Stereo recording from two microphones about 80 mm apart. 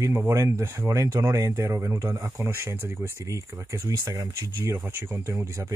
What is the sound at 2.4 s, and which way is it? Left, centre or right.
Speech, right.